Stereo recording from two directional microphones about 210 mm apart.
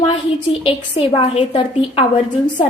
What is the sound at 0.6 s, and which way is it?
A woman's voice, 25° left (ahead or behind).